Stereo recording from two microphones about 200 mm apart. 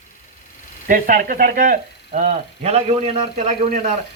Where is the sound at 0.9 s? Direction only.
45° right (ahead or behind).